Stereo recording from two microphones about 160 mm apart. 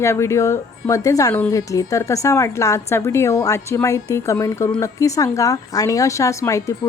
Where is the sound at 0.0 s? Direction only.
15° left (ahead or behind).